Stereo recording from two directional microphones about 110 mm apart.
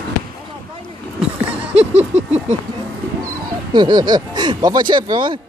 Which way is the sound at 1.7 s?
90° right.